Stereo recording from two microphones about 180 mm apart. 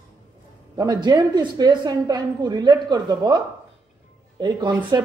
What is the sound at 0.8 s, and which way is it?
A woman's voice, 20° right (ahead or behind).